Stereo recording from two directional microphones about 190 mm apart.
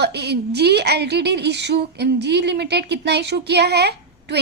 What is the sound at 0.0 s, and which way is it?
A woman's voice, 60° right (ahead or behind).